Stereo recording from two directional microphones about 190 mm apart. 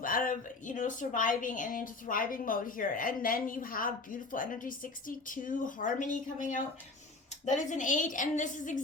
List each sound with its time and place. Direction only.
0.0 s a woman's voice: 45° left (ahead or behind)